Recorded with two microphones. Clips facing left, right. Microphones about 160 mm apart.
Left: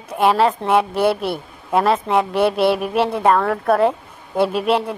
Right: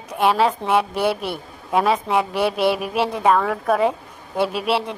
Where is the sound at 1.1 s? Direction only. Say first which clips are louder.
Left 4 dB; 40° left (ahead or behind).